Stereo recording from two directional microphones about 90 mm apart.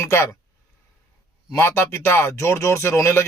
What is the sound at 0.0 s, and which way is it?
Speech, 30° left (ahead or behind).